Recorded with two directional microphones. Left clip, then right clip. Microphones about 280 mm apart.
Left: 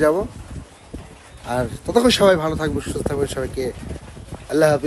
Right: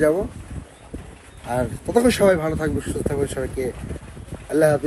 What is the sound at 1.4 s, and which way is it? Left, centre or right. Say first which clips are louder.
A man's voice: left 1 dB; centre.